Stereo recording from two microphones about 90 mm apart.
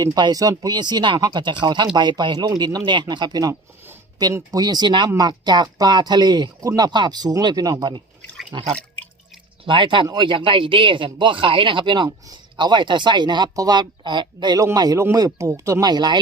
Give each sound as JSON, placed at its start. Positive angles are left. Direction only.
{"t": 0.0, "sound": "speech", "side_deg": -50}
{"t": 4.5, "sound": "speech", "side_deg": -50}
{"t": 5.1, "sound": "speech", "side_deg": -45}
{"t": 6.6, "sound": "speech", "side_deg": -40}
{"t": 9.6, "sound": "speech", "side_deg": -65}
{"t": 14.6, "sound": "speech", "side_deg": -40}
{"t": 15.8, "sound": "speech", "side_deg": -50}